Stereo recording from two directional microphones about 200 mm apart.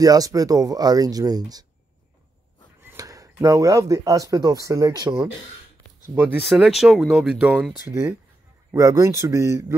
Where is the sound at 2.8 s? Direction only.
15° right (ahead or behind).